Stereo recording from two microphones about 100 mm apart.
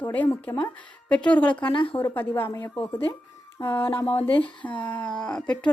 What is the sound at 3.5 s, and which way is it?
Speech, 25° left (ahead or behind).